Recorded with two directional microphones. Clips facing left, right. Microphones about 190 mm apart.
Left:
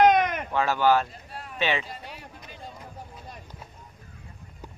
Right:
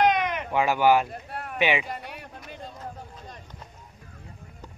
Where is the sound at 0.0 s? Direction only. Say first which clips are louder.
Left 3 dB; 45° left (ahead or behind).